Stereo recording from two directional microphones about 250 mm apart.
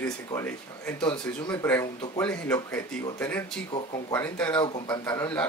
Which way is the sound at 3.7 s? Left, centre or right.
Left.